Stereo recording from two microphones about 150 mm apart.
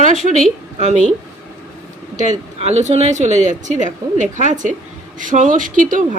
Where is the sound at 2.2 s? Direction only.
50° right (ahead or behind).